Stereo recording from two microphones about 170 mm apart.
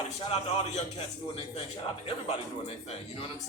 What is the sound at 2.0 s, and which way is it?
Speech, 35° left (ahead or behind).